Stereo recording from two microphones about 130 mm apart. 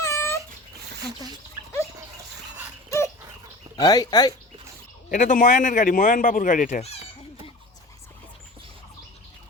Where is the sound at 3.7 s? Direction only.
30° left (ahead or behind).